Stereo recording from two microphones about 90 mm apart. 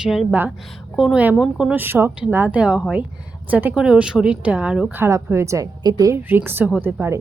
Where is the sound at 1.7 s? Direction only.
25° right (ahead or behind).